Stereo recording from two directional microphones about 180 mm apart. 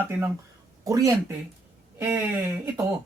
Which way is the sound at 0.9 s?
20° right (ahead or behind).